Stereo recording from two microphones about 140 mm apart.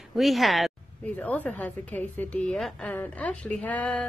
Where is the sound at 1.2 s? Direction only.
10° left (ahead or behind).